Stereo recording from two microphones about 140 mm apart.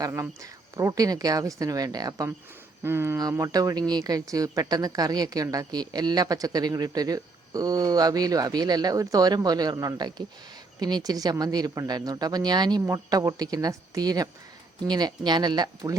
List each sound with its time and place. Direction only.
0.0 s speech: 20° right (ahead or behind)